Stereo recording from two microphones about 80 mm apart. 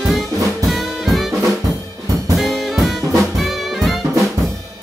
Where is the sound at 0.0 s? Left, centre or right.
Centre.